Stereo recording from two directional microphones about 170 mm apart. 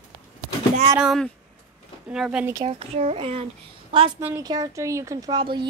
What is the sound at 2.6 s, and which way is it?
Speech, 35° right (ahead or behind).